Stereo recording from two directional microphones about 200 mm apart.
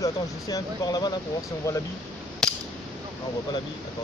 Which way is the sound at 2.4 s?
5° left (ahead or behind).